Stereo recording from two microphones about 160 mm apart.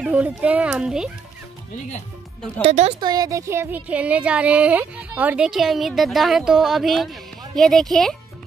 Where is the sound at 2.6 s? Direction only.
40° right (ahead or behind).